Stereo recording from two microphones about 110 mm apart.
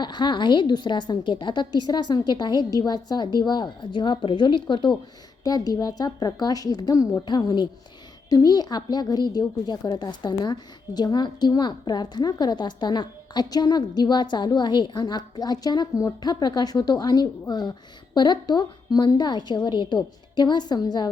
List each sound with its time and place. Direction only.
0.0 s a woman's voice: 45° left (ahead or behind)